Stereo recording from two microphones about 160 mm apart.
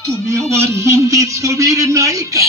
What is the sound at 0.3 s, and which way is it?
A man's voice, 20° right (ahead or behind).